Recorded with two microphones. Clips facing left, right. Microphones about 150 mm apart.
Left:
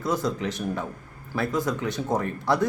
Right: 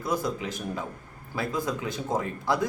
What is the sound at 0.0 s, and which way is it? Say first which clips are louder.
Speech: left 2 dB; 25° left (ahead or behind).